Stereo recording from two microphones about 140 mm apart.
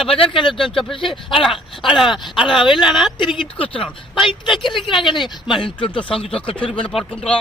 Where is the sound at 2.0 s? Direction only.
Centre (ahead or behind).